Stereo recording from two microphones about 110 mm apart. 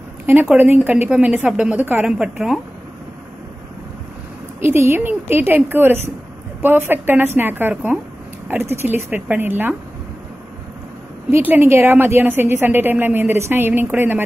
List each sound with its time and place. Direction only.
0.3 s a woman's voice: 15° right (ahead or behind)
4.6 s a woman's voice: 20° right (ahead or behind)
11.2 s a woman's voice: 20° right (ahead or behind)